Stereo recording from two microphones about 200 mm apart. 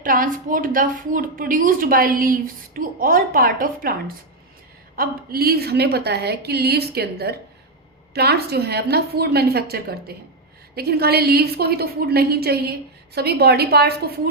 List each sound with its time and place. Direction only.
0.0 s a woman's voice: 45° right (ahead or behind)
4.9 s a woman's voice: 50° right (ahead or behind)